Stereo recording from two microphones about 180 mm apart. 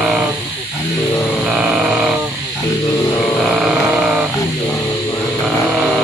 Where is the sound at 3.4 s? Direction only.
Centre (ahead or behind).